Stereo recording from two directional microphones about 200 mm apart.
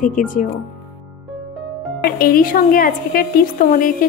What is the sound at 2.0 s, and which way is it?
A woman's voice, 45° left (ahead or behind).